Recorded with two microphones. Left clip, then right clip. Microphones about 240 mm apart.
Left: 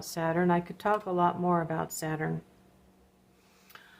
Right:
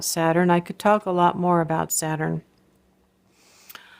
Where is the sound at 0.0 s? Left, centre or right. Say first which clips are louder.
Right 8 dB; right.